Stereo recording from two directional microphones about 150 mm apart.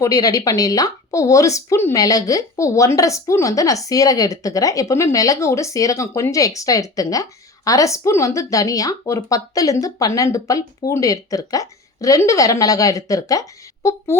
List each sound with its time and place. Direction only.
0.0 s speech: 25° left (ahead or behind)